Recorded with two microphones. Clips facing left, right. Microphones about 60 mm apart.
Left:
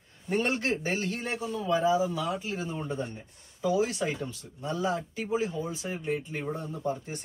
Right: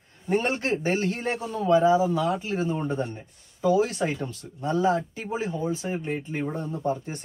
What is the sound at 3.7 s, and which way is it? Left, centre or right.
Speech, right.